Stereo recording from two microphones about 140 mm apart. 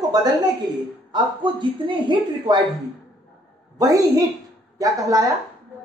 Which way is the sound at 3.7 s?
25° right (ahead or behind).